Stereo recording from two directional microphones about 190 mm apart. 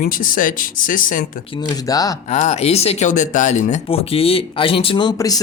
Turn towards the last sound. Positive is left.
turn(degrees=20)  # may be behind; listen again after turning